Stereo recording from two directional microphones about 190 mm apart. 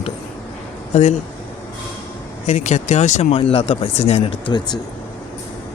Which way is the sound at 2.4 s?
40° left (ahead or behind).